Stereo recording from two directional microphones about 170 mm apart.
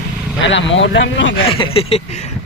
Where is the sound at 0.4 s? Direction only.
90° left.